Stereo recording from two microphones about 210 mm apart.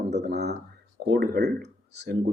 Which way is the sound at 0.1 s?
55° right (ahead or behind).